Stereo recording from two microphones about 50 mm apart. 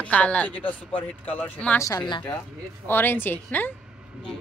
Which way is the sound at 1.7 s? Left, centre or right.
Left.